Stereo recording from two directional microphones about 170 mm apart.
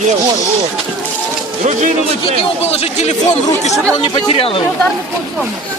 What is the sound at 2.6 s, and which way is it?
Speech, 40° left (ahead or behind).